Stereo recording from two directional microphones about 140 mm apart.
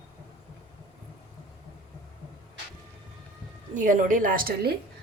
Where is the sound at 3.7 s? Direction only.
65° right (ahead or behind).